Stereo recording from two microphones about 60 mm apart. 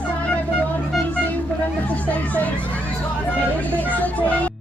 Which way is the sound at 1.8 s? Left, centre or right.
Left.